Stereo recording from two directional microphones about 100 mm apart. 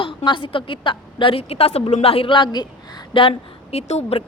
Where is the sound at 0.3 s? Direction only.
60° left (ahead or behind).